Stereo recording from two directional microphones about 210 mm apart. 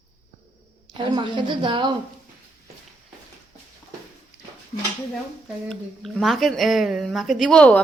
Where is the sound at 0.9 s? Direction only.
20° right (ahead or behind).